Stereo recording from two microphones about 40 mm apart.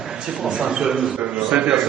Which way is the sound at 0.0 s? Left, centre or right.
Centre.